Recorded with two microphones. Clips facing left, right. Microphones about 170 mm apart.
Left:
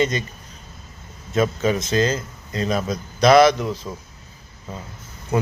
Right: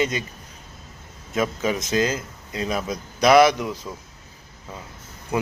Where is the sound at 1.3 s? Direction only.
10° right (ahead or behind).